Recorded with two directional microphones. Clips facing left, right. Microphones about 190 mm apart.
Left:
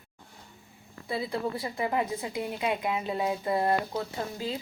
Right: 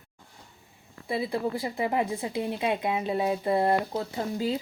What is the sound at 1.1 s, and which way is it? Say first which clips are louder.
A woman's voice: right 3 dB; 25° right (ahead or behind).